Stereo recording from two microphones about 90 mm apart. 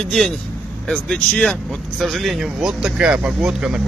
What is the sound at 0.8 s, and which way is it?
Speech, 10° left (ahead or behind).